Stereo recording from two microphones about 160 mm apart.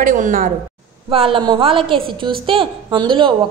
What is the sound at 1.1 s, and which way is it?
Speech, 35° right (ahead or behind).